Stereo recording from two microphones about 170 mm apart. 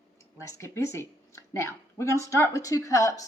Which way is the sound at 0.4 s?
15° left (ahead or behind).